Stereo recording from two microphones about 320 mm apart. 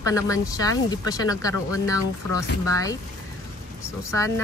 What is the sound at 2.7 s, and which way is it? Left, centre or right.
Speech, centre.